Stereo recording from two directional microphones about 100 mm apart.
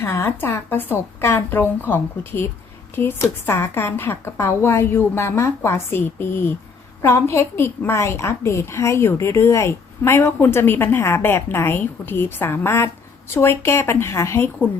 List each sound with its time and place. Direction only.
0.0 s a woman's voice: 25° left (ahead or behind)